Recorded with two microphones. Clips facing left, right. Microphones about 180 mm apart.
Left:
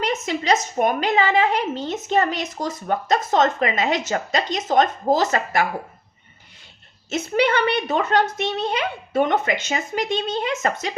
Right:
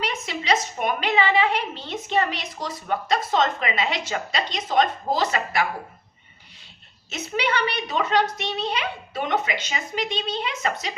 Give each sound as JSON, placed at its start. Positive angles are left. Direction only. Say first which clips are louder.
{"t": 0.0, "sound": "a woman's voice", "louder": "left 6 dB", "side_deg": 45}
{"t": 7.1, "sound": "a woman's voice", "louder": "left 6 dB", "side_deg": 50}